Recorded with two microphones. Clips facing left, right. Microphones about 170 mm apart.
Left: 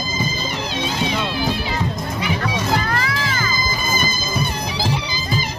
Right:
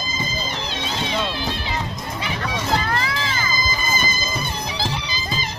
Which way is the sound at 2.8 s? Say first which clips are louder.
Left 1 dB; 25° right (ahead or behind).